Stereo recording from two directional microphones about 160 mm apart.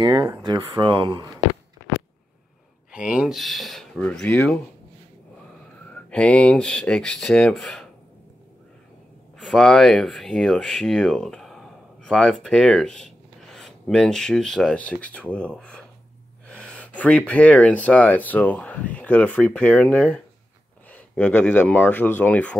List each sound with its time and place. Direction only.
0.0 s speech: 25° right (ahead or behind)
2.9 s speech: 5° right (ahead or behind)
5.9 s speech: 5° left (ahead or behind)
9.4 s speech: 5° left (ahead or behind)
16.4 s gasp: 5° left (ahead or behind)
17.3 s speech: 10° left (ahead or behind)